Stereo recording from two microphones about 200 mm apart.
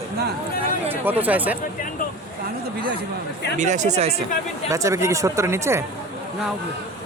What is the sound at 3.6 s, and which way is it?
Speech, 35° right (ahead or behind).